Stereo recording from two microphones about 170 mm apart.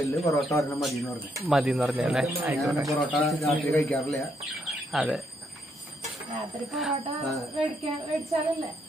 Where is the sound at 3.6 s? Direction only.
5° left (ahead or behind).